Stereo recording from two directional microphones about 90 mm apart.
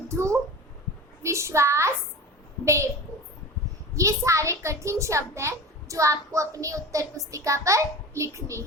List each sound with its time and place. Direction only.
0.1 s a child's voice: 35° right (ahead or behind)
3.9 s a child's voice: 35° right (ahead or behind)